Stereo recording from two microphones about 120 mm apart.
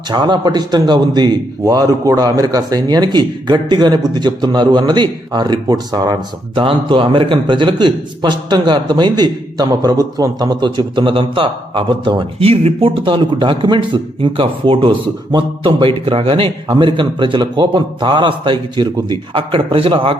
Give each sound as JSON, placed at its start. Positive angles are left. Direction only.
{"t": 0.1, "sound": "a man's voice", "side_deg": -40}
{"t": 12.4, "sound": "a man's voice", "side_deg": -55}